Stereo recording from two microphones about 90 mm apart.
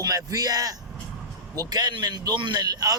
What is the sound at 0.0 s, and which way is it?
A man's voice, 40° right (ahead or behind).